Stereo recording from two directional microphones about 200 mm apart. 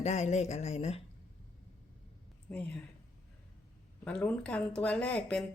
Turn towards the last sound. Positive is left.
turn(degrees=5)  # may be behind; listen again after turning